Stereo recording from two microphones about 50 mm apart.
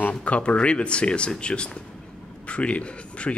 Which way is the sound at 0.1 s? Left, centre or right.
Left.